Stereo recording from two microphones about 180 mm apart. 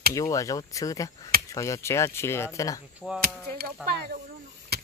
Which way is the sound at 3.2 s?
60° right (ahead or behind).